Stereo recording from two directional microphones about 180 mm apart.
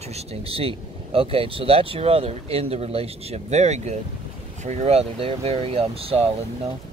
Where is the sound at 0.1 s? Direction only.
35° right (ahead or behind).